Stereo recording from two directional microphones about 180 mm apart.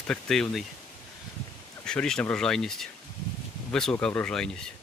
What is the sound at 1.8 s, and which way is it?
Speech, 5° left (ahead or behind).